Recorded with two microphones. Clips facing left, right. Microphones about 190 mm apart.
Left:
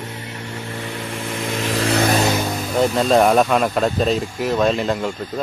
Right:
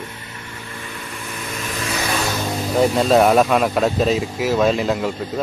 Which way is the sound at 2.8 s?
Centre (ahead or behind).